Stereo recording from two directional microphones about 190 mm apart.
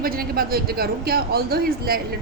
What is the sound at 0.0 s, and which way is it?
A man's voice, 50° right (ahead or behind).